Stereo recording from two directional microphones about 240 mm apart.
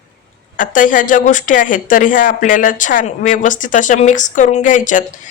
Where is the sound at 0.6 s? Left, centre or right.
Left.